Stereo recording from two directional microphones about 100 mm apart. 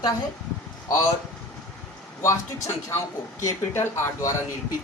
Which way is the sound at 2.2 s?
25° left (ahead or behind).